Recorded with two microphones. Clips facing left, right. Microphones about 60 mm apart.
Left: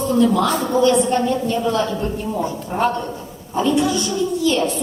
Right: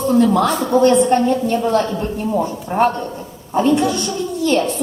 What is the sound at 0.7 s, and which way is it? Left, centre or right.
A woman's voice, right.